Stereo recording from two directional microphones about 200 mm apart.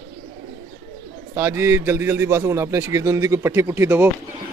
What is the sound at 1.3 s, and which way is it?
A man's voice, 10° right (ahead or behind).